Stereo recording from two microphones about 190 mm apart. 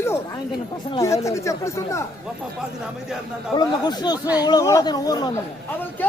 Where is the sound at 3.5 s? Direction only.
20° left (ahead or behind).